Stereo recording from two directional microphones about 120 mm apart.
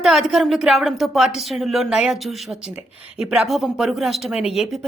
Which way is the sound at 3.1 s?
5° right (ahead or behind).